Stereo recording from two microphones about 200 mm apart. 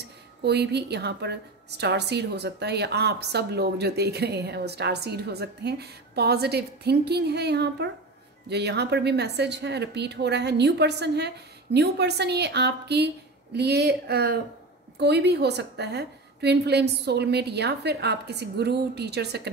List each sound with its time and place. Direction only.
0.4 s a woman's voice: 55° right (ahead or behind)